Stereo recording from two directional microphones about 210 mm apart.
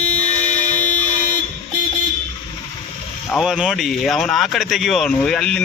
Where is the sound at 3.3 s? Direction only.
Centre (ahead or behind).